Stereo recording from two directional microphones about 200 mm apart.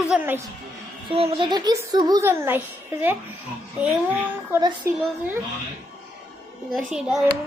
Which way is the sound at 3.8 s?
5° right (ahead or behind).